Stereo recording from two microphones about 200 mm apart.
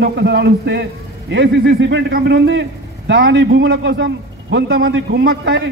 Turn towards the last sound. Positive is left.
turn(degrees=-60)  # may be behind; listen again after turning